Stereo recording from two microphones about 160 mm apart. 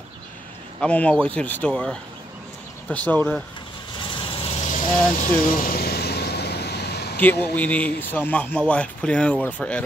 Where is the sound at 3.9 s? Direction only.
30° left (ahead or behind).